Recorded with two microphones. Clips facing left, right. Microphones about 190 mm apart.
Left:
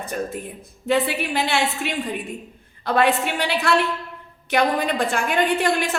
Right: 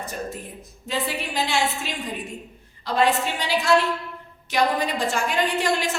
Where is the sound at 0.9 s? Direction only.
65° left (ahead or behind).